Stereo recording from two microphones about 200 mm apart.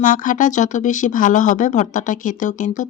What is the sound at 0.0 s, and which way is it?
Speech, 40° left (ahead or behind).